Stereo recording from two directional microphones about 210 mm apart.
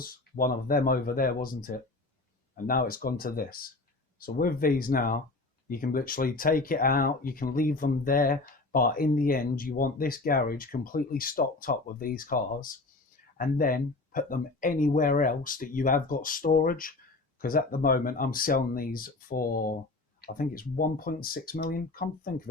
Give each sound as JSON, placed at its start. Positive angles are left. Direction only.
{"t": 0.0, "sound": "speech", "side_deg": 45}